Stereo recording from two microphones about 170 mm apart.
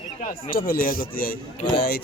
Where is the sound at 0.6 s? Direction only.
60° left (ahead or behind).